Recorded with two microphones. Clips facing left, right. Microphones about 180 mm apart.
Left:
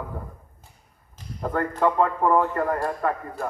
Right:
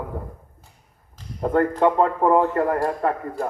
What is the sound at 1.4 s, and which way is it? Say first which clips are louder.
A man's voice: right 5 dB; 30° right (ahead or behind).